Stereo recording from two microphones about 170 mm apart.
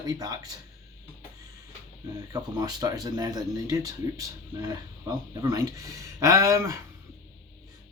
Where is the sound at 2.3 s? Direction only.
25° right (ahead or behind).